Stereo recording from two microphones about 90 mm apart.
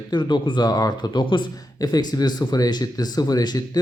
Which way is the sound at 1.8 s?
45° left (ahead or behind).